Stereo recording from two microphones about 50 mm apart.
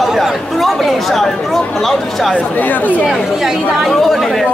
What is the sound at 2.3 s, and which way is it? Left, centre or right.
Speech, left.